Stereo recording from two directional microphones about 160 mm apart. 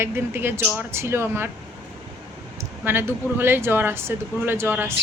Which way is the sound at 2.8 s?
15° right (ahead or behind).